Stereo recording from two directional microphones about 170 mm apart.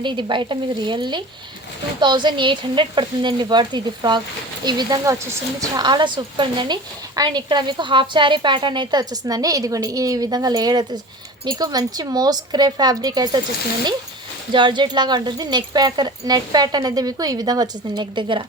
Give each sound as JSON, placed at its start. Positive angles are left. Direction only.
{"t": 0.0, "sound": "speech", "side_deg": -30}
{"t": 14.5, "sound": "speech", "side_deg": -25}